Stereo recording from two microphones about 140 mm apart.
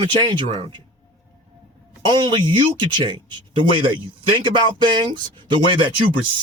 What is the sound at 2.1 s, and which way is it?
Speech, 35° right (ahead or behind).